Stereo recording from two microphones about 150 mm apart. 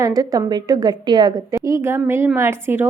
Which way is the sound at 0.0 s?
25° right (ahead or behind).